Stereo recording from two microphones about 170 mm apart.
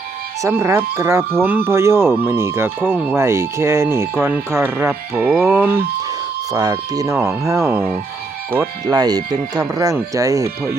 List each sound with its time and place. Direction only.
0.4 s speech: 15° right (ahead or behind)
6.5 s speech: 20° right (ahead or behind)
8.9 s speech: 25° right (ahead or behind)